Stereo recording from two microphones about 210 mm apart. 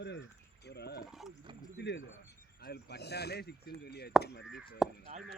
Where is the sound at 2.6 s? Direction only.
50° left (ahead or behind).